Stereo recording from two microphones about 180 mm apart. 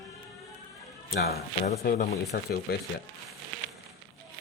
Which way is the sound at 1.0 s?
60° left (ahead or behind).